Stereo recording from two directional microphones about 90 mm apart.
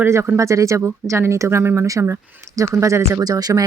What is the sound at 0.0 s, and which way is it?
Speech, 30° right (ahead or behind).